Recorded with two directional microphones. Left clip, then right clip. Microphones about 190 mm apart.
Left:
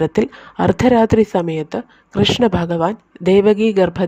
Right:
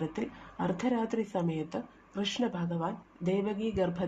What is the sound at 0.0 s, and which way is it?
A woman's voice, 55° left (ahead or behind).